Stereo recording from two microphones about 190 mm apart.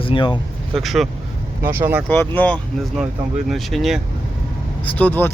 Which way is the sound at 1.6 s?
10° right (ahead or behind).